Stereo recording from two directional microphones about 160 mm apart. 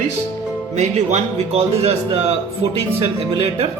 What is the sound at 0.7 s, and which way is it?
A man's voice, 45° right (ahead or behind).